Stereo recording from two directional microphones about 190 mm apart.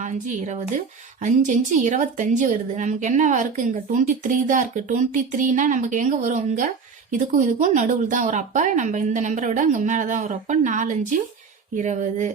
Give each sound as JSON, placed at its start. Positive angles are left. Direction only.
{"t": 1.2, "sound": "a woman's voice", "side_deg": -40}